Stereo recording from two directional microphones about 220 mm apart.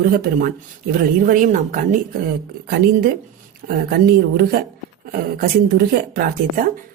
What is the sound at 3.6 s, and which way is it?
Speech, 40° right (ahead or behind).